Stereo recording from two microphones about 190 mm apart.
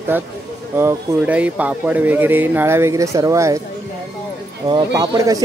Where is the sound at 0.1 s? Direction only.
10° right (ahead or behind).